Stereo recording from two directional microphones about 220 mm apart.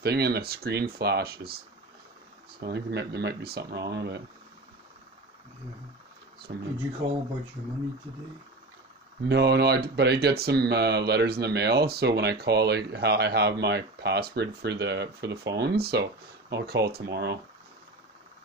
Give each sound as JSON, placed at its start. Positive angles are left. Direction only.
{"t": 0.0, "sound": "speech", "side_deg": -45}
{"t": 2.6, "sound": "speech", "side_deg": -50}
{"t": 6.5, "sound": "speech", "side_deg": -50}
{"t": 9.3, "sound": "speech", "side_deg": -50}